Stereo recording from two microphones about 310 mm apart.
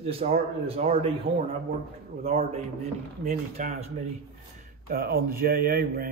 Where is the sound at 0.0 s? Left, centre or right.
Centre.